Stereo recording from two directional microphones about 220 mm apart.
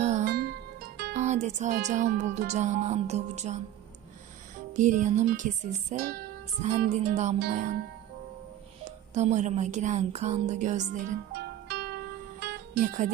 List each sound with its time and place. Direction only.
0.0 s music: 30° right (ahead or behind)
0.3 s music: 45° right (ahead or behind)
1.1 s speech: 30° right (ahead or behind)
4.7 s speech: 35° right (ahead or behind)
6.6 s speech: 30° right (ahead or behind)
8.8 s speech: 30° right (ahead or behind)
12.4 s music: 45° right (ahead or behind)